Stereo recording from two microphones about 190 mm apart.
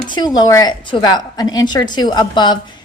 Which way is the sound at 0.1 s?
20° left (ahead or behind).